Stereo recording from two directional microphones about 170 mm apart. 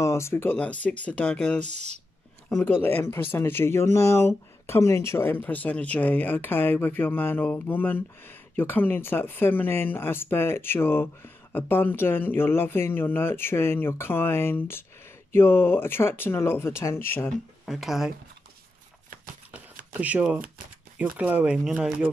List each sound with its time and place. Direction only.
0.0 s speech: 15° left (ahead or behind)
1.6 s speech: 40° right (ahead or behind)
2.6 s speech: 10° left (ahead or behind)
17.6 s speech: centre (ahead or behind)
19.9 s speech: 10° right (ahead or behind)